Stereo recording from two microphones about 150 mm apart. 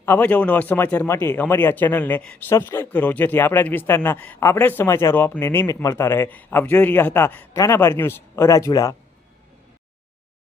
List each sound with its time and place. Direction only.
0.0 s a man's voice: 10° left (ahead or behind)